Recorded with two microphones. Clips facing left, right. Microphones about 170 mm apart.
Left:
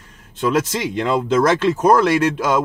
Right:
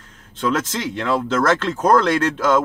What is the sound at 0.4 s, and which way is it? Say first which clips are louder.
Speech: left 3 dB; 10° left (ahead or behind).